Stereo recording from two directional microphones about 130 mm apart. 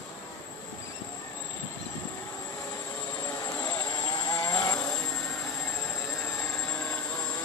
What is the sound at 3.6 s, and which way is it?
Vehicle, 30° left (ahead or behind).